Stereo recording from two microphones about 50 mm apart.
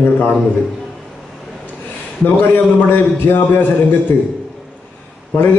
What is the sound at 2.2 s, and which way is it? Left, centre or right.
A man's voice, left.